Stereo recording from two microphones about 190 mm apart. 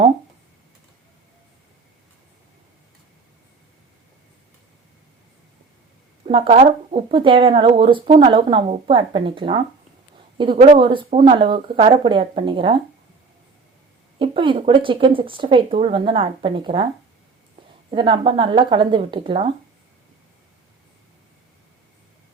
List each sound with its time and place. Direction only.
6.2 s speech: 30° right (ahead or behind)
14.2 s speech: 25° right (ahead or behind)
17.9 s speech: 25° right (ahead or behind)